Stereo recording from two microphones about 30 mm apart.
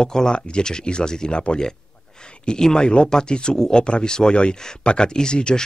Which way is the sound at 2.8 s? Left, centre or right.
Left.